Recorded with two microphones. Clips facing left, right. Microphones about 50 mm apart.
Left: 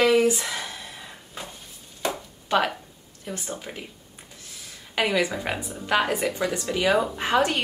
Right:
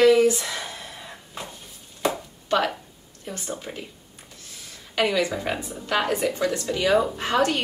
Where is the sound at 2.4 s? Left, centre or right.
Centre.